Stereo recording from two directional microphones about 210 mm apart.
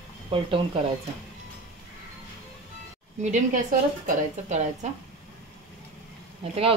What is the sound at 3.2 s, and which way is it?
A woman's voice, 40° right (ahead or behind).